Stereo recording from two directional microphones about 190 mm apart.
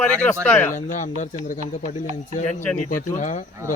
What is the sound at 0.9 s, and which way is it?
Speech, 40° left (ahead or behind).